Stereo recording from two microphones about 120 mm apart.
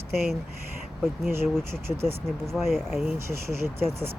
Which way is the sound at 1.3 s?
20° right (ahead or behind).